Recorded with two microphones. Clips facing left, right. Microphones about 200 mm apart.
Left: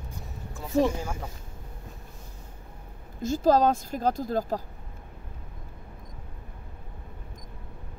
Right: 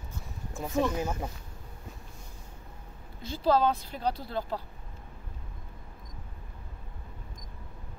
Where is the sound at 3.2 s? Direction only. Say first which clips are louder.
Left 4 dB; 45° left (ahead or behind).